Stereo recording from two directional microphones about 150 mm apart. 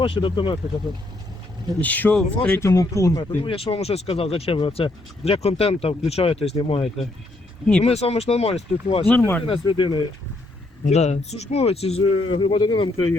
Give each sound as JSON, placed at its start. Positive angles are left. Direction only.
{"t": 0.0, "sound": "speech", "side_deg": 35}
{"t": 1.8, "sound": "speech", "side_deg": 10}
{"t": 2.6, "sound": "speech", "side_deg": 20}
{"t": 3.4, "sound": "speech", "side_deg": 40}
{"t": 9.0, "sound": "speech", "side_deg": 10}
{"t": 9.5, "sound": "speech", "side_deg": 30}
{"t": 10.8, "sound": "speech", "side_deg": 50}